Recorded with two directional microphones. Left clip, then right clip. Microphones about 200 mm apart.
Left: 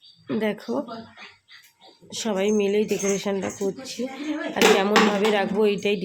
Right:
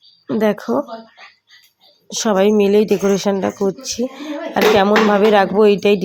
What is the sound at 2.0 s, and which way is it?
Speech, 25° right (ahead or behind).